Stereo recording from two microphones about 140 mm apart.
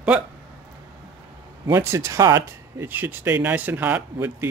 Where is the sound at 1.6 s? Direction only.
20° right (ahead or behind).